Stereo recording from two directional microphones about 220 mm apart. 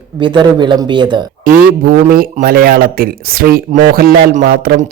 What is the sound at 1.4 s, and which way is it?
A man's voice, 40° right (ahead or behind).